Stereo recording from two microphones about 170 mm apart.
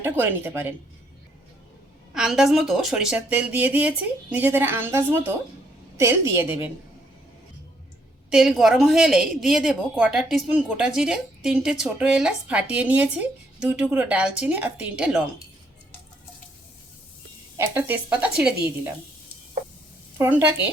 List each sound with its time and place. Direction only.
0.0 s speech: 10° right (ahead or behind)
2.1 s speech: 5° right (ahead or behind)
8.3 s a woman's voice: 5° right (ahead or behind)
17.6 s speech: 10° right (ahead or behind)
20.1 s speech: 15° right (ahead or behind)